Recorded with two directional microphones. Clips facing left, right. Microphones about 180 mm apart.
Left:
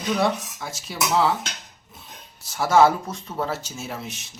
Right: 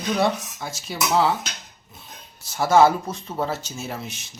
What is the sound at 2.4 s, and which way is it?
Speech, centre (ahead or behind).